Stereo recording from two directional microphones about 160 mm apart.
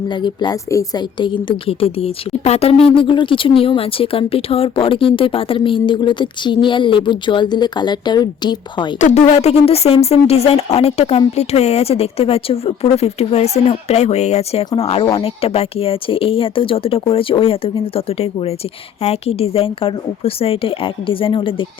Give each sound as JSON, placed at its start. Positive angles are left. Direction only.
{"t": 0.1, "sound": "a woman's voice", "side_deg": 30}
{"t": 9.0, "sound": "a woman's voice", "side_deg": 50}